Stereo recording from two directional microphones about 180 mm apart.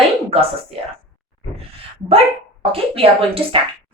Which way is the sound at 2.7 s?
30° right (ahead or behind).